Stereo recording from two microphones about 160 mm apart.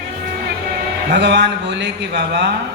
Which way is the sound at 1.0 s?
90° right.